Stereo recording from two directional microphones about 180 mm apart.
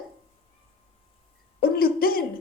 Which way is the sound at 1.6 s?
55° left (ahead or behind).